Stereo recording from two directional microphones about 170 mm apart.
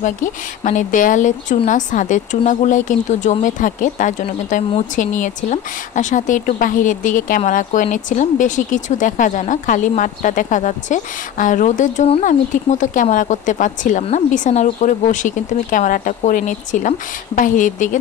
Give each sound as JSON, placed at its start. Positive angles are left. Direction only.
{"t": 0.0, "sound": "speech", "side_deg": 50}